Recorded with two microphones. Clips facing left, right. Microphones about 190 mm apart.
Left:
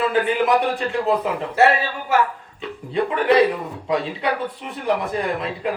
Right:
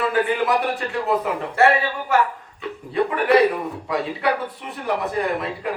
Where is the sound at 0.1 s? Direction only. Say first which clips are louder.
Left 2 dB; 25° left (ahead or behind).